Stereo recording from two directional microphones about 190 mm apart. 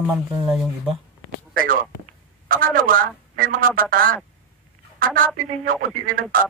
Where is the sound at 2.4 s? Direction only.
45° right (ahead or behind).